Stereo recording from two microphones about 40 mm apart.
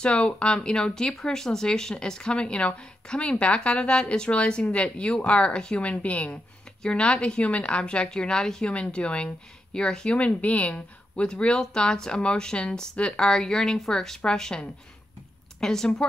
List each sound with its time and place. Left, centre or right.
0.0 s speech: left
5.8 s speech: left
6.8 s speech: left
8.1 s a woman's voice: centre
8.6 s speech: left
9.8 s a woman's voice: centre
10.1 s speech: left
11.2 s a woman's voice: left